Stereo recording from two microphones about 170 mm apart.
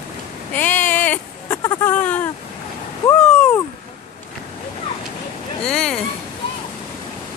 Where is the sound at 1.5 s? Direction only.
20° left (ahead or behind).